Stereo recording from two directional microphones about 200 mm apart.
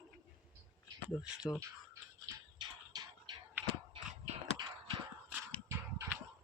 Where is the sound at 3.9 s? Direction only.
25° right (ahead or behind).